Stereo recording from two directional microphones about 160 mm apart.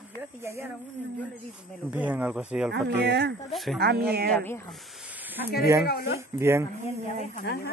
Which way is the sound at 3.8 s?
85° right.